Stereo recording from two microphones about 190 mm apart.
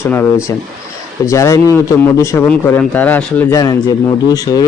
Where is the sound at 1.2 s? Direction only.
15° left (ahead or behind).